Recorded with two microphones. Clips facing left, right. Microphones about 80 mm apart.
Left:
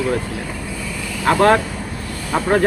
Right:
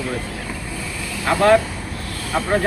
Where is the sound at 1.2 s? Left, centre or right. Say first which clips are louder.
Left 1 dB; left.